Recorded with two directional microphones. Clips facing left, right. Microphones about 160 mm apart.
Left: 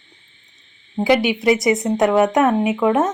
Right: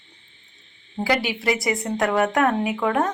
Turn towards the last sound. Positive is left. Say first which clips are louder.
# left 5 dB
turn(degrees=20)  # may be behind; listen again after turning